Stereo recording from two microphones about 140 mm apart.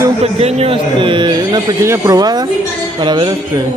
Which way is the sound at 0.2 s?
45° right (ahead or behind).